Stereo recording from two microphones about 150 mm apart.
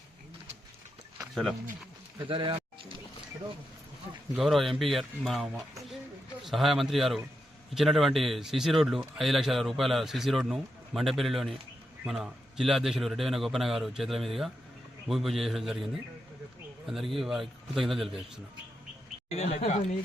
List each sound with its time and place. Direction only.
2.1 s speech: 30° right (ahead or behind)
4.4 s speech: centre (ahead or behind)
19.3 s speech: 45° left (ahead or behind)